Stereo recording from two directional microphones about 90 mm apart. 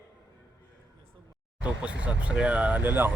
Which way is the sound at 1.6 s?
15° right (ahead or behind).